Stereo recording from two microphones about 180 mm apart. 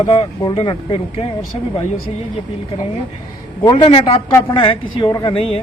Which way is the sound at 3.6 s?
30° left (ahead or behind).